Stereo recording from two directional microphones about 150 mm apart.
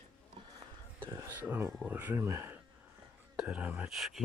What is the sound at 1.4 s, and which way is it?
Speech, 10° right (ahead or behind).